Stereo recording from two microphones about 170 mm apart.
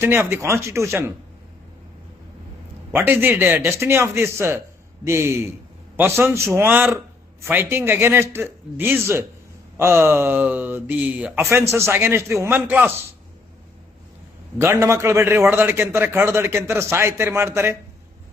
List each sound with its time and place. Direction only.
0.0 s speech: 15° right (ahead or behind)
2.9 s speech: 10° right (ahead or behind)
14.6 s speech: 15° right (ahead or behind)